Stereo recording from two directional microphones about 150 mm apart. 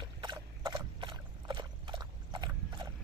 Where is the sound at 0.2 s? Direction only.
25° right (ahead or behind).